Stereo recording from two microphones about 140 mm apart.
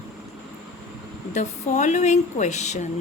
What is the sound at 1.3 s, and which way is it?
A woman's voice, 55° left (ahead or behind).